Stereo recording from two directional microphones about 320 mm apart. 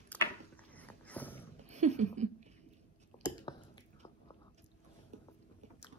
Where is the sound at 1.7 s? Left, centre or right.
Right.